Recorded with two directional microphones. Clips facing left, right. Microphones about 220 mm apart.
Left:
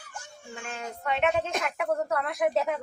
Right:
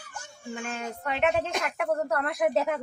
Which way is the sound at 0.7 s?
Centre (ahead or behind).